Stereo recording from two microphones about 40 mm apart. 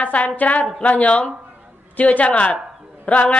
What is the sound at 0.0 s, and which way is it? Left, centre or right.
A woman's voice, left.